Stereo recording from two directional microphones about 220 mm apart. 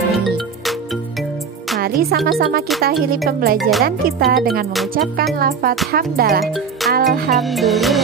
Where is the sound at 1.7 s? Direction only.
45° right (ahead or behind).